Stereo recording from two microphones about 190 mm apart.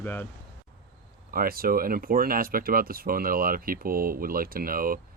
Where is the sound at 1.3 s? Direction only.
50° right (ahead or behind).